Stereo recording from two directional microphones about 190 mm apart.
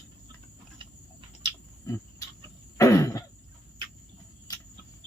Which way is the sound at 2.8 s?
15° left (ahead or behind).